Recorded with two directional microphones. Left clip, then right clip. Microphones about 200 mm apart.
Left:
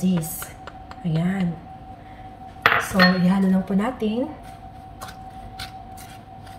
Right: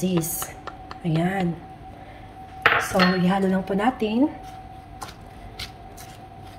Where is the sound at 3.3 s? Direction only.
50° right (ahead or behind).